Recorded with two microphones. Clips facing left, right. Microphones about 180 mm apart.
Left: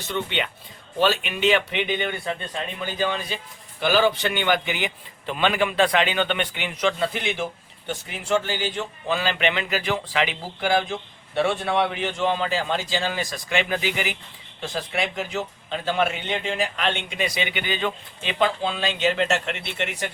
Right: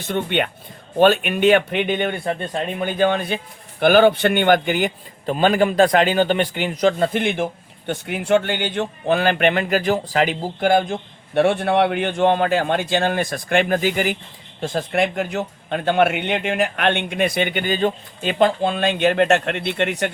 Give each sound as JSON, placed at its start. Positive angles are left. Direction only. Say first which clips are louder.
{"t": 0.0, "sound": "a man's voice", "louder": "right 6 dB", "side_deg": -55}